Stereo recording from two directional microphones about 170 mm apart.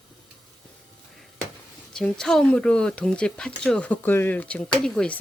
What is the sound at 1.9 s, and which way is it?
Speech, 5° left (ahead or behind).